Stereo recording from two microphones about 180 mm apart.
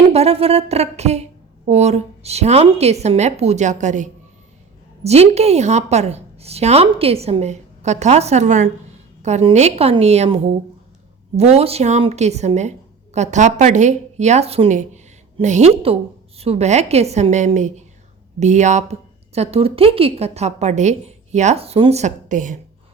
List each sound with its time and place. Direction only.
0.1 s speech: 35° right (ahead or behind)